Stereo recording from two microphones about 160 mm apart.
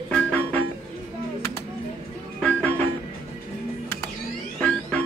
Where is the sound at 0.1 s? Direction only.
10° left (ahead or behind).